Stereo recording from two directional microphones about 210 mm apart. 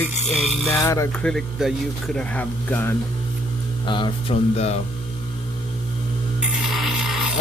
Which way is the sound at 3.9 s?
20° left (ahead or behind).